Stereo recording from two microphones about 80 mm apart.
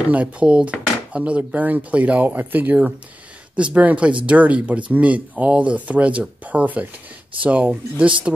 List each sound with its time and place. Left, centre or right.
0.1 s speech: centre